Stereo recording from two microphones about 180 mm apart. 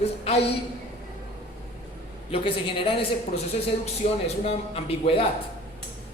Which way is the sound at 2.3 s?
30° left (ahead or behind).